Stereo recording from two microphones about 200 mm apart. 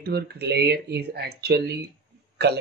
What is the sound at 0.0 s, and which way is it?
Speech, 55° right (ahead or behind).